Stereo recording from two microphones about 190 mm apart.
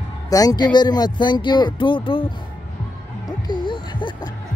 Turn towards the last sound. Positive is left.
turn(degrees=25)  # may be behind; listen again after turning